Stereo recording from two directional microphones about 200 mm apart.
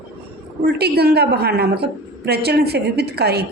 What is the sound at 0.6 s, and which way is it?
A woman's voice, 55° right (ahead or behind).